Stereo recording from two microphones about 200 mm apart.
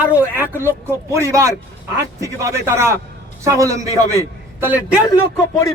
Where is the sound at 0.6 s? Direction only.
15° right (ahead or behind).